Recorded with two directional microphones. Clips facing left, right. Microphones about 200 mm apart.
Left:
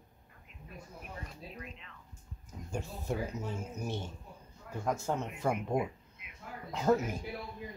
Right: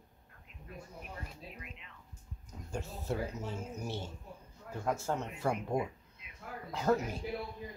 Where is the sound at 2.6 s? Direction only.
15° left (ahead or behind).